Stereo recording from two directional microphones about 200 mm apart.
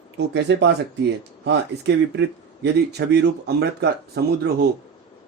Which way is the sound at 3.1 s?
55° right (ahead or behind).